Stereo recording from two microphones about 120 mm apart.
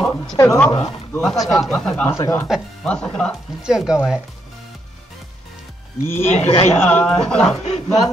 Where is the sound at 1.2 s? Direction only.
Centre (ahead or behind).